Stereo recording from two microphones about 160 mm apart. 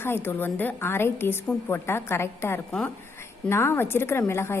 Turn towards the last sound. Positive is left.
turn(degrees=15)  # may be behind; listen again after turning